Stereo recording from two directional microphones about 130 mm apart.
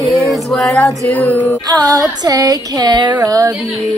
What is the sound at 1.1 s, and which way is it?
Music, 10° left (ahead or behind).